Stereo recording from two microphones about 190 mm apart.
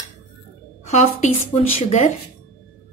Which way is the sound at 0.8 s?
35° left (ahead or behind).